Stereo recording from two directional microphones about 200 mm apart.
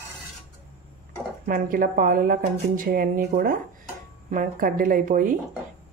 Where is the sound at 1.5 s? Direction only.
45° right (ahead or behind).